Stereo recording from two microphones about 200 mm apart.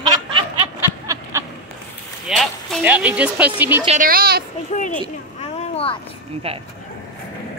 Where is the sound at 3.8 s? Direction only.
40° right (ahead or behind).